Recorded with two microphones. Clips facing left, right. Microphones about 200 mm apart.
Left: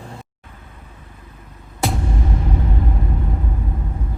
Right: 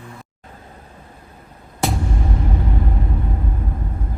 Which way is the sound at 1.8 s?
Centre (ahead or behind).